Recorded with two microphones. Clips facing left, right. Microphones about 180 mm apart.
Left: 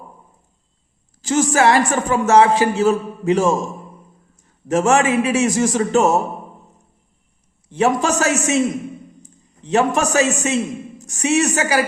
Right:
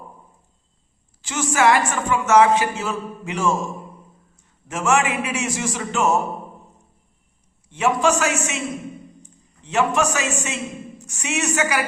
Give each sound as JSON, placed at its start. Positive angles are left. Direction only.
{"t": 1.2, "sound": "a man's voice", "side_deg": 40}
{"t": 4.7, "sound": "a man's voice", "side_deg": 35}
{"t": 7.7, "sound": "a man's voice", "side_deg": 35}
{"t": 9.6, "sound": "a man's voice", "side_deg": 35}